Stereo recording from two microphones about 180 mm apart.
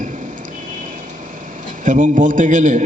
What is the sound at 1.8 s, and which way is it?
A man's voice, 45° right (ahead or behind).